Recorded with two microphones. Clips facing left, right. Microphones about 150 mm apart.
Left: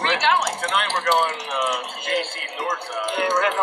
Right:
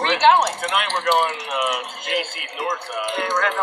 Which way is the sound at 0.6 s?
10° right (ahead or behind).